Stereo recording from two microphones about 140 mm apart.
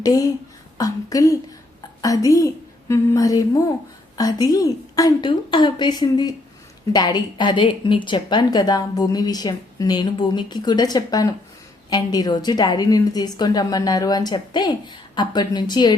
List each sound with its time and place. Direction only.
0.0 s a woman's voice: 25° left (ahead or behind)